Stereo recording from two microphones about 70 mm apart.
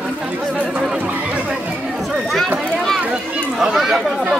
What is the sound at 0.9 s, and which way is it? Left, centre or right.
Chatter, centre.